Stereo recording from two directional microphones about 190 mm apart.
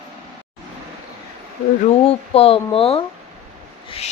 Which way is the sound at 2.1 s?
30° left (ahead or behind).